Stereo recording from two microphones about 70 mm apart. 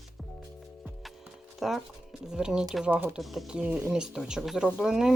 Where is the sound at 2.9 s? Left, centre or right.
Right.